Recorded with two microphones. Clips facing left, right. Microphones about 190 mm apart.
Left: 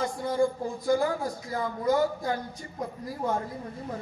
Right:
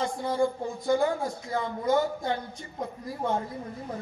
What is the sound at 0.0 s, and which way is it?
Speech, 25° right (ahead or behind).